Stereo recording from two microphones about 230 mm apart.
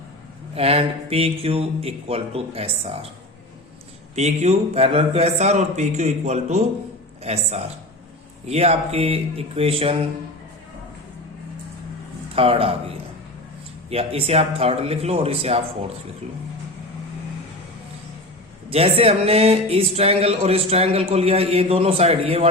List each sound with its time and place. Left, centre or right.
0.5 s speech: right
4.1 s speech: right
8.4 s speech: right
12.3 s speech: right
18.7 s speech: right